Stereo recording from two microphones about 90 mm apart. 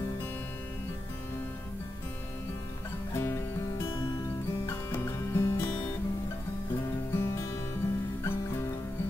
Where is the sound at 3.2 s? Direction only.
30° left (ahead or behind).